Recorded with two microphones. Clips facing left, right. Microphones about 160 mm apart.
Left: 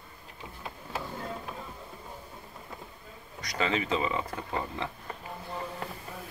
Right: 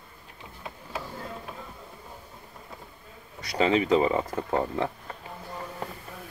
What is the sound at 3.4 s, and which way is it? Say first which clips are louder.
Speech: right 7 dB; 30° right (ahead or behind).